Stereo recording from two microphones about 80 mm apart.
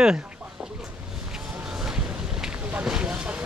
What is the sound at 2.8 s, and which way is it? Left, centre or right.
Vehicle, centre.